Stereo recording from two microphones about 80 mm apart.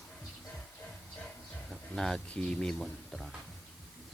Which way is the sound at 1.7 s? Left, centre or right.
Centre.